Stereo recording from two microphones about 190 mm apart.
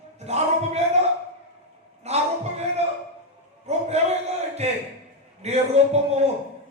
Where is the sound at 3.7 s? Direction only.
35° right (ahead or behind).